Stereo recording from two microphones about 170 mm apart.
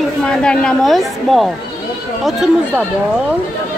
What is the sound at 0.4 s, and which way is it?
Speech, 5° left (ahead or behind).